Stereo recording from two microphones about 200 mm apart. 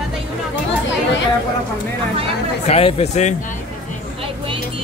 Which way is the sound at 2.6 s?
30° left (ahead or behind).